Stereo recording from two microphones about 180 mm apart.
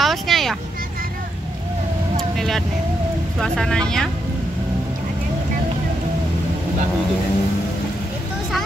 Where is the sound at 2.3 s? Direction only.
Centre (ahead or behind).